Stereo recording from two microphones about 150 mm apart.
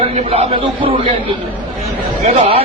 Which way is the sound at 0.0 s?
40° right (ahead or behind).